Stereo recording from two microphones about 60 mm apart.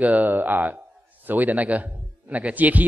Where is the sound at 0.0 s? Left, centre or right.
Right.